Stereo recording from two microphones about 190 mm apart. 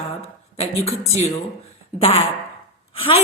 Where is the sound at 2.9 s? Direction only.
30° left (ahead or behind).